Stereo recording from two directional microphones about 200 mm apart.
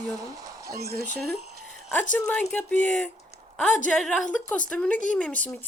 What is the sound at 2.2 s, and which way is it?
A woman's voice, 5° left (ahead or behind).